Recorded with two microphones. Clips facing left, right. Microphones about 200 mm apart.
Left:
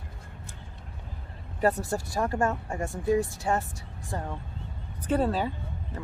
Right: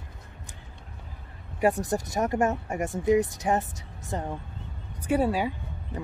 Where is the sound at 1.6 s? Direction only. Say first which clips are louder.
Right 2 dB; 15° right (ahead or behind).